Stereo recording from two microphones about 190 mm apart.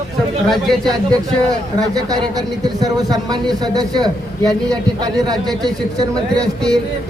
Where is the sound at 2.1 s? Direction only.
20° right (ahead or behind).